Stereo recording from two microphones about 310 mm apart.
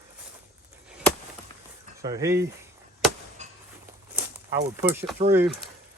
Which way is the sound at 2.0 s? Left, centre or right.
Centre.